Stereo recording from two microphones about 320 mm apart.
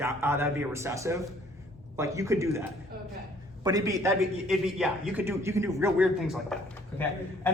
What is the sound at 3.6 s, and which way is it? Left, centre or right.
A man's voice, centre.